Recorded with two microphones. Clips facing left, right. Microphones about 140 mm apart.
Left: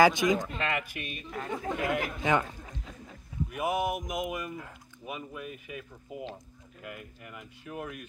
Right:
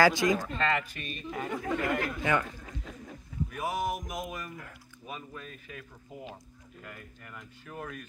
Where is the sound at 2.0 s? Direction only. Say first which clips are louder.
Left 1 dB; 20° left (ahead or behind).